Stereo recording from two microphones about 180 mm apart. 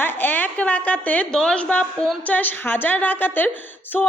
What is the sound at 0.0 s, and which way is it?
A woman's voice, 10° left (ahead or behind).